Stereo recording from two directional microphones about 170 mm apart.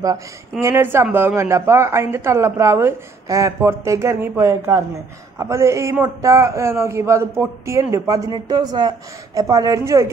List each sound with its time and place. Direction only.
0.0 s a man's voice: 20° right (ahead or behind)